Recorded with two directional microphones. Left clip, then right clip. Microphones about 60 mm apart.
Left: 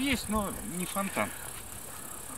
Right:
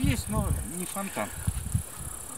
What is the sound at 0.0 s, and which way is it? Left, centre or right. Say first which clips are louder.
Speech: left 1 dB; centre.